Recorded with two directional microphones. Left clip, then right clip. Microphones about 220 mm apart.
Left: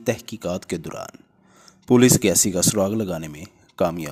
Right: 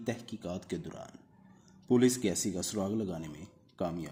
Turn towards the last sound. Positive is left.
turn(degrees=40)  # may be behind; listen again after turning